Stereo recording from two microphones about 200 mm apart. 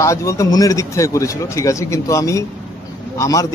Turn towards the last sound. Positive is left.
turn(degrees=15)  # may be behind; listen again after turning